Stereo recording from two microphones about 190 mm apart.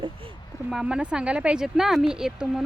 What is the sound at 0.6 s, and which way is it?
Speech, 5° right (ahead or behind).